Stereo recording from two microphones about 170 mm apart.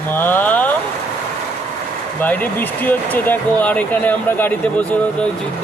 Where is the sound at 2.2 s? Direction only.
10° left (ahead or behind).